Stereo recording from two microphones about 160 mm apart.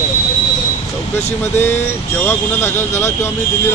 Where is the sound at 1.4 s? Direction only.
15° left (ahead or behind).